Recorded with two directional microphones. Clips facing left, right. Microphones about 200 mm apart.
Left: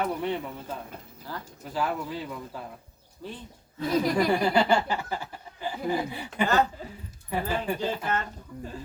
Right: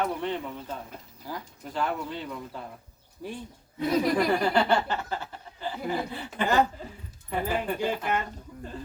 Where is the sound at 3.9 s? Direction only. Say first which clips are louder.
Even; centre (ahead or behind).